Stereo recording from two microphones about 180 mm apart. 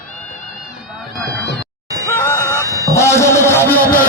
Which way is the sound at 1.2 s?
65° left (ahead or behind).